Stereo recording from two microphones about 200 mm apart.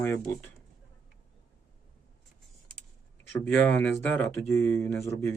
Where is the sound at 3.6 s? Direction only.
10° left (ahead or behind).